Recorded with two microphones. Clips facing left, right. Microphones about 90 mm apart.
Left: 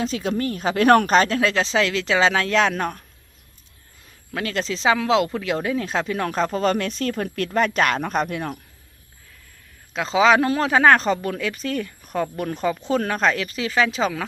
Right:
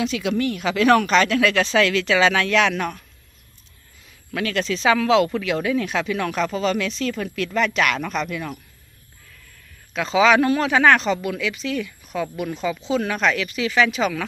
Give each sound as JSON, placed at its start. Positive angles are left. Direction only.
{"t": 0.0, "sound": "speech", "side_deg": 35}
{"t": 4.3, "sound": "speech", "side_deg": 25}
{"t": 9.9, "sound": "speech", "side_deg": 25}